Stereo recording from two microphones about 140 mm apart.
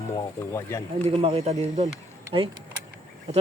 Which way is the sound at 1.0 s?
45° right (ahead or behind).